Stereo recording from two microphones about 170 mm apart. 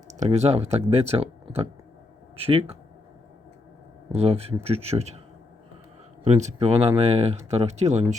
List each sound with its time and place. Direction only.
0.1 s speech: 40° right (ahead or behind)
4.1 s speech: 35° right (ahead or behind)
6.2 s speech: 45° right (ahead or behind)